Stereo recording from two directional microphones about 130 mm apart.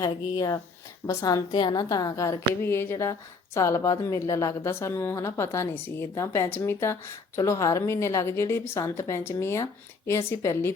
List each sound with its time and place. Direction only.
0.0 s a woman's voice: 25° left (ahead or behind)